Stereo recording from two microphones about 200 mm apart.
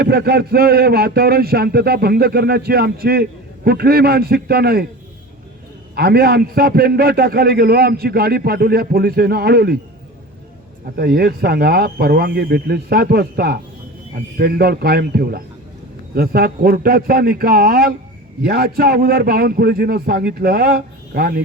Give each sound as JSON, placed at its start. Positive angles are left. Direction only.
{"t": 0.0, "sound": "a man's voice", "side_deg": -50}
{"t": 5.9, "sound": "a man's voice", "side_deg": -50}
{"t": 10.9, "sound": "a man's voice", "side_deg": -50}